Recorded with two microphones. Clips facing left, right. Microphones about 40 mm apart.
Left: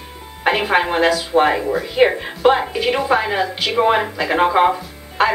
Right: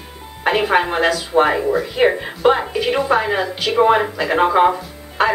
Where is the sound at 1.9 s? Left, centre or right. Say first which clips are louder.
Left 1 dB; centre.